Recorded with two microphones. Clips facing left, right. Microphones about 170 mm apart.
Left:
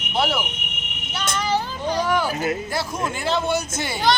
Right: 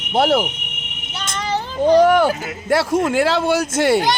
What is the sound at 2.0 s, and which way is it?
Speech, 60° right (ahead or behind).